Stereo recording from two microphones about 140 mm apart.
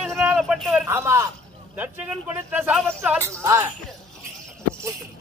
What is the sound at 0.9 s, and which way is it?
Speech, 20° right (ahead or behind).